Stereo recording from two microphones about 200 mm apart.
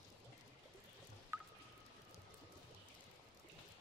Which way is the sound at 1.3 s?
10° right (ahead or behind).